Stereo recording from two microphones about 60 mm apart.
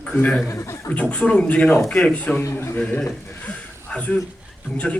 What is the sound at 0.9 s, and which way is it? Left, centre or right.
A man's voice, left.